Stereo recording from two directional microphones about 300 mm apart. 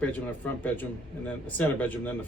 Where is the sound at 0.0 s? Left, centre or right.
Centre.